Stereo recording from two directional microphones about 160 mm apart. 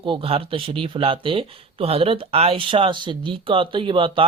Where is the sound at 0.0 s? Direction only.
35° right (ahead or behind).